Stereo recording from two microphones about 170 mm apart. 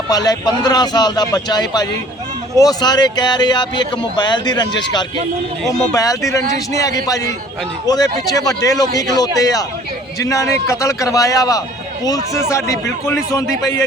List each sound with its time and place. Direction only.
0.1 s speech: 20° left (ahead or behind)
5.9 s speech: 20° left (ahead or behind)